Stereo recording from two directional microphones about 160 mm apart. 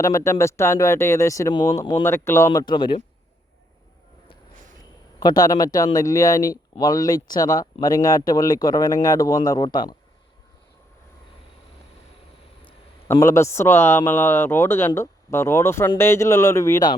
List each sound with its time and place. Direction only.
0.0 s speech: 20° left (ahead or behind)
5.2 s speech: 25° left (ahead or behind)
12.6 s speech: 15° left (ahead or behind)